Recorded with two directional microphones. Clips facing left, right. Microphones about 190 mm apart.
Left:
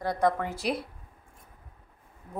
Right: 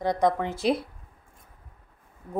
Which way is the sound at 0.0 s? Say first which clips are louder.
Right 3 dB; 20° right (ahead or behind).